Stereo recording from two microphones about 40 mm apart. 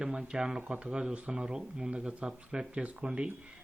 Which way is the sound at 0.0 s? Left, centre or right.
Right.